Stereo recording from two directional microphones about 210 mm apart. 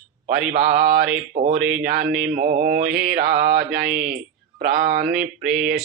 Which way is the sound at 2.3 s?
45° right (ahead or behind).